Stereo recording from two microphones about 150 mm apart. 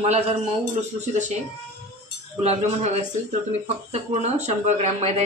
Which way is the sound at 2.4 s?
50° right (ahead or behind).